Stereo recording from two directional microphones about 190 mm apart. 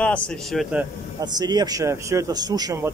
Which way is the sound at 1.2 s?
20° right (ahead or behind).